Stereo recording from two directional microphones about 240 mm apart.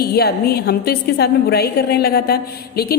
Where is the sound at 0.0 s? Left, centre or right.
Left.